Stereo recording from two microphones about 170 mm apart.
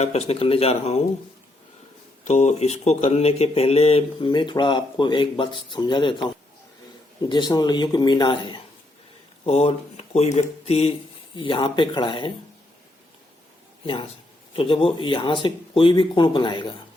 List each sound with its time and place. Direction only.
0.0 s speech: 40° left (ahead or behind)
2.2 s speech: 40° left (ahead or behind)
14.5 s speech: 35° left (ahead or behind)